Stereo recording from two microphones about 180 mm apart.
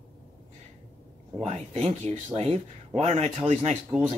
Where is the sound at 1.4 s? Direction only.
35° right (ahead or behind).